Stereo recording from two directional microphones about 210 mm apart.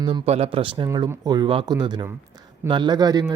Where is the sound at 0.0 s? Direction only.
25° right (ahead or behind).